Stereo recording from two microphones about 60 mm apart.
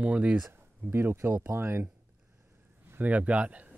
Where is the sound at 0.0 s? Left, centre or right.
Right.